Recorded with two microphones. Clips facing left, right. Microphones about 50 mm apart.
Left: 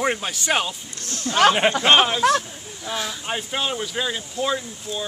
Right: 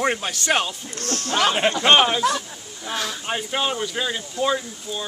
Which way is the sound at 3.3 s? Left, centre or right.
Centre.